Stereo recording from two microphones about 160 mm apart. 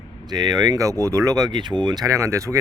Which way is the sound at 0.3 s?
25° right (ahead or behind).